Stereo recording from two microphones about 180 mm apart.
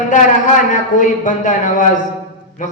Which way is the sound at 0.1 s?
45° left (ahead or behind).